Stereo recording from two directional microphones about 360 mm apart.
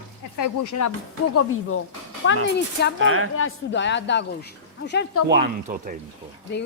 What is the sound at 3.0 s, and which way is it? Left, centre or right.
Speech, right.